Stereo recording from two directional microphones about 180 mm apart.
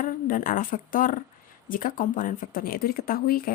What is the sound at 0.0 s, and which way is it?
A woman's voice, 50° left (ahead or behind).